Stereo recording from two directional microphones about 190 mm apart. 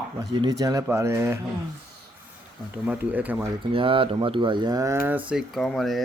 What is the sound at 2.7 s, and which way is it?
Speech, 10° right (ahead or behind).